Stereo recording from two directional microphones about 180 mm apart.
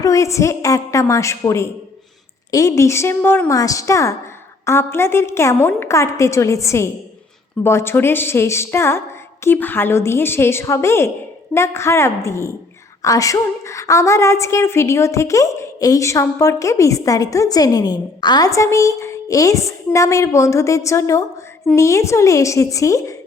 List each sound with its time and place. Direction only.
0.0 s a woman's voice: 15° left (ahead or behind)